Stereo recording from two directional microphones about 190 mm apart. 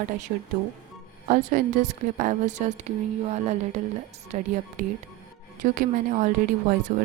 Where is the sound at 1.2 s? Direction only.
40° right (ahead or behind).